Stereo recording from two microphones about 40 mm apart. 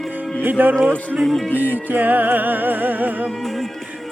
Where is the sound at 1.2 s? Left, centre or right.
Centre.